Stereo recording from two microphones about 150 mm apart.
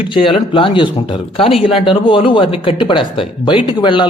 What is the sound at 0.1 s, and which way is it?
Speech, 35° left (ahead or behind).